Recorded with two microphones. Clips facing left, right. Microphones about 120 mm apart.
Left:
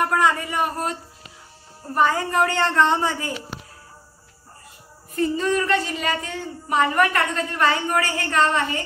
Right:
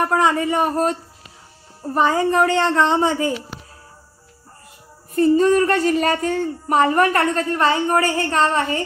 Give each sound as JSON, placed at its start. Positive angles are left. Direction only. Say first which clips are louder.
{"t": 0.1, "sound": "a woman's voice", "louder": "right 3 dB", "side_deg": -25}
{"t": 2.0, "sound": "a woman's voice", "louder": "right 3 dB", "side_deg": -25}
{"t": 5.1, "sound": "speech", "louder": "right 7 dB", "side_deg": -40}